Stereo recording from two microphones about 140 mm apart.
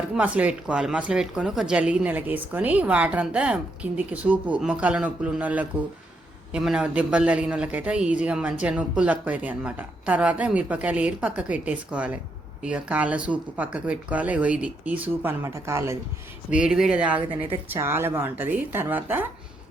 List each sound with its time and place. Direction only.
0.1 s speech: 10° right (ahead or behind)
16.5 s speech: 5° right (ahead or behind)
17.2 s a woman's voice: 40° right (ahead or behind)
17.7 s speech: 15° right (ahead or behind)